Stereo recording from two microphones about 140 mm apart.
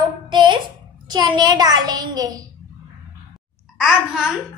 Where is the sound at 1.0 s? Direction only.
30° right (ahead or behind).